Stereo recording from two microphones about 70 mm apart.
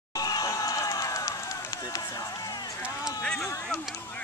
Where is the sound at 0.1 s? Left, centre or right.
Left.